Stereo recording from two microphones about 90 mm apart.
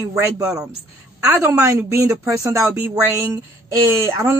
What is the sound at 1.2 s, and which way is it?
Speech, 30° right (ahead or behind).